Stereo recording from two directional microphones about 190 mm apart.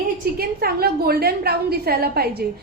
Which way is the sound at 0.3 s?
55° right (ahead or behind).